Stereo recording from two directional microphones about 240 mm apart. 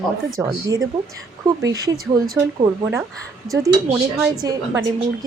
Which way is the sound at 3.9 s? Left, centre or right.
Centre.